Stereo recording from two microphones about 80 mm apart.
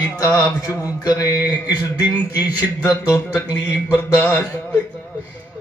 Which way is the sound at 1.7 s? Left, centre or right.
Left.